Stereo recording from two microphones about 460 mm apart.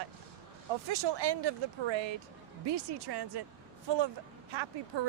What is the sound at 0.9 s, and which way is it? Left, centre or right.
Speech, right.